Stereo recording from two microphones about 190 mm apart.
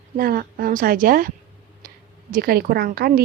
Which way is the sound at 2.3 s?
50° right (ahead or behind).